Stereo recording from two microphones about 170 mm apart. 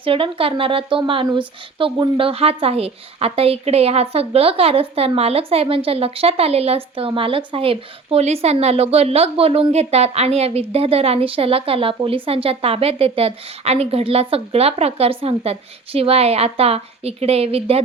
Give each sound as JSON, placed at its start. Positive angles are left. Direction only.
{"t": 0.0, "sound": "speech", "side_deg": -30}